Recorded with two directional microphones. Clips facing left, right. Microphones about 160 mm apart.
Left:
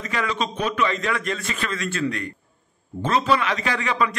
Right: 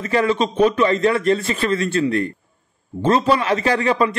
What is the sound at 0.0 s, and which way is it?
A man's voice, 30° right (ahead or behind).